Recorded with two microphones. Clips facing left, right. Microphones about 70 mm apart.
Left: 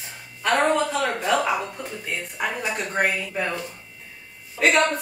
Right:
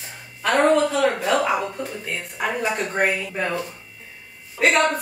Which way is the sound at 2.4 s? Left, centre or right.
Centre.